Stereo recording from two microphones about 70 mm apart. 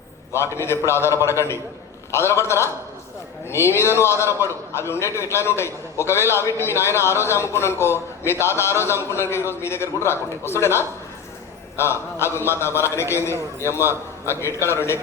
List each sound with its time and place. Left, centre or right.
0.5 s a man's voice: left